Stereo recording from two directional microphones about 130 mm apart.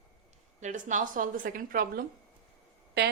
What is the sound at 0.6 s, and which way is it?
A woman's voice, 75° right (ahead or behind).